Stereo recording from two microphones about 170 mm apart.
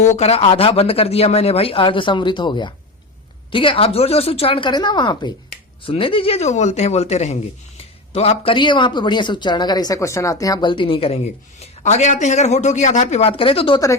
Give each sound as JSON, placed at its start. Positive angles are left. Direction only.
{"t": 0.0, "sound": "speech", "side_deg": 40}